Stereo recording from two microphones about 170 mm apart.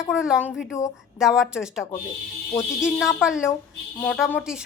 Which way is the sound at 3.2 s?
5° right (ahead or behind).